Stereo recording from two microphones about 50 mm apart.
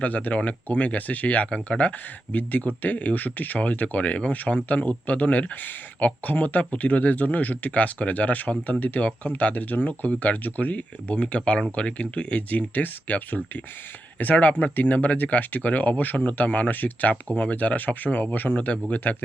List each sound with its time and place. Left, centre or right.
0.0 s speech: left
2.3 s speech: left